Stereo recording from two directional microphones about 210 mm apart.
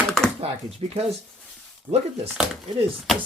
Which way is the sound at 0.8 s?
25° right (ahead or behind).